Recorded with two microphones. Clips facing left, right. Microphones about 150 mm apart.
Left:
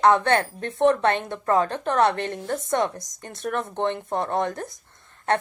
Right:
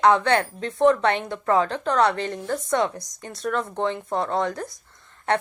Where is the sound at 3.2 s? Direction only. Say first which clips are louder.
Right 2 dB; 50° left (ahead or behind).